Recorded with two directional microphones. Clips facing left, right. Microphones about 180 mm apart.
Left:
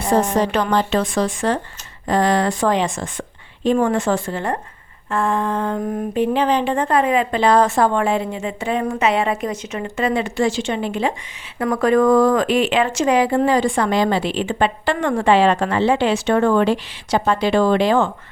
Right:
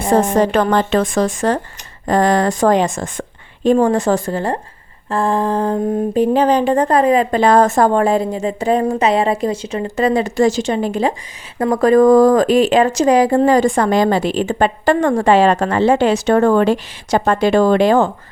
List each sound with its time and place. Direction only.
0.0 s speech: 50° right (ahead or behind); by 4.6 s 35° right (ahead or behind)
5.0 s a sound: 35° right (ahead or behind)
11.6 s speech: 40° right (ahead or behind)